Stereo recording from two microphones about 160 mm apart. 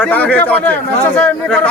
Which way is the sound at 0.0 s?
10° left (ahead or behind).